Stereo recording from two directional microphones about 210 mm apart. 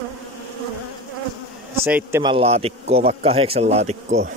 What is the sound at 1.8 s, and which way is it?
Speech, 10° right (ahead or behind).